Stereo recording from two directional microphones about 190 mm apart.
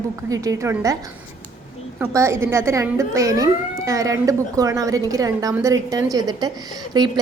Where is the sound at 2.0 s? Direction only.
15° right (ahead or behind).